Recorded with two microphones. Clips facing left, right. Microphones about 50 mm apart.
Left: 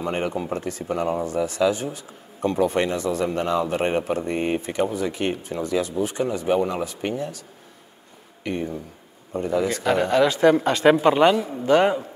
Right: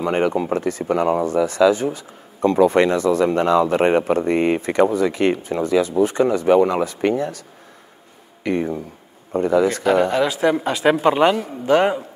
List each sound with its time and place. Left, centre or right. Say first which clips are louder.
0.0 s speech: right 6 dB; right
5.5 s speech: right 6 dB; right
9.3 s speech: right 6 dB; right
9.8 s speech: right 2 dB; centre
11.3 s a man's voice: right 1 dB; right